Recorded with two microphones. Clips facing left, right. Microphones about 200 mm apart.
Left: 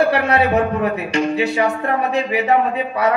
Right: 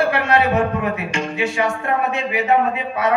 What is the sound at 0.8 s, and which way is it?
Speech, 35° left (ahead or behind).